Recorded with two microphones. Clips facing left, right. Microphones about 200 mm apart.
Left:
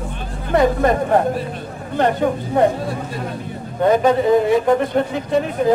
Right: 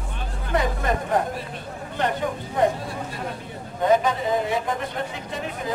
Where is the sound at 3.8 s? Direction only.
55° left (ahead or behind).